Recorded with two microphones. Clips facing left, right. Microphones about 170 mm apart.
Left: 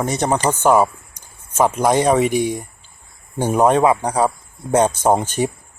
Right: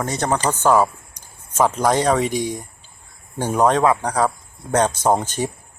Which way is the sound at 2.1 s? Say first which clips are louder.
Left 4 dB; 10° left (ahead or behind).